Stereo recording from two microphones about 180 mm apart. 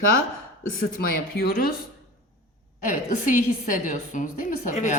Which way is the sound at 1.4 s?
55° left (ahead or behind).